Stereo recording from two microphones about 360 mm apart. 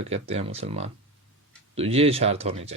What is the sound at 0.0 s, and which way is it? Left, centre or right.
Speech, centre.